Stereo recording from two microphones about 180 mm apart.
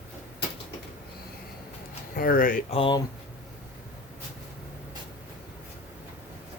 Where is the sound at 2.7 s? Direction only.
30° left (ahead or behind).